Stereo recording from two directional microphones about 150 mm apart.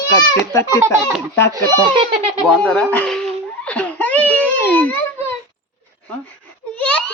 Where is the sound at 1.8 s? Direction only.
35° right (ahead or behind).